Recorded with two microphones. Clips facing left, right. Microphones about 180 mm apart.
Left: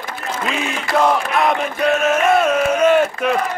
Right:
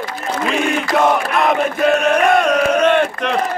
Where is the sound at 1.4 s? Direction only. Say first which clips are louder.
Right 2 dB; centre (ahead or behind).